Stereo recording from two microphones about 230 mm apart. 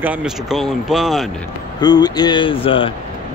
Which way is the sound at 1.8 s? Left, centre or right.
Centre.